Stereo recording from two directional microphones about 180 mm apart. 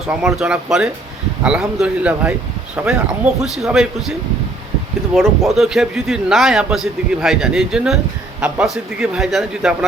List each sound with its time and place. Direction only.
0.2 s a man's voice: centre (ahead or behind)
5.1 s a man's voice: centre (ahead or behind)